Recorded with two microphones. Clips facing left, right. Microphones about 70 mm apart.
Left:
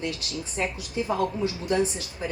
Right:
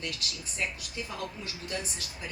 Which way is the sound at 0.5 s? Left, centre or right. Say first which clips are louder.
Left 7 dB; left.